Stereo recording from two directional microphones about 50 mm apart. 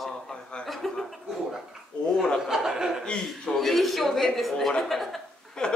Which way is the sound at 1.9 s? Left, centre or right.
Left.